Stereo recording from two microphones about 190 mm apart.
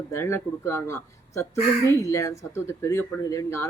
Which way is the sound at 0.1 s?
15° left (ahead or behind).